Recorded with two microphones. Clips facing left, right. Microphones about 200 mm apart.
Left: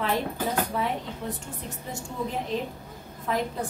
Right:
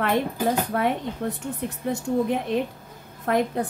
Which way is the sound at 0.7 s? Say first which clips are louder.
Right 5 dB; 65° right (ahead or behind).